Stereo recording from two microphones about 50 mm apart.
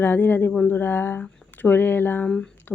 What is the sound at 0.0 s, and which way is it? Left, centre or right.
Speech, left.